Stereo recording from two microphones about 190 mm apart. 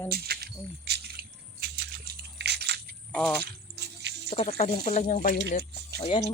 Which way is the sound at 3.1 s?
5° left (ahead or behind).